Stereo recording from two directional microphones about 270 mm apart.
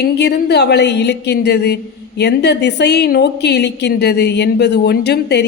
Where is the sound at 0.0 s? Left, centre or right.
Left.